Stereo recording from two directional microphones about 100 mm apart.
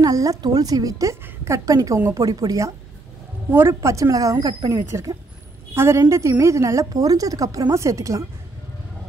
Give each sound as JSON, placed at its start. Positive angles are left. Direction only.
{"t": 0.0, "sound": "a woman's voice", "side_deg": -35}
{"t": 3.4, "sound": "a woman's voice", "side_deg": -25}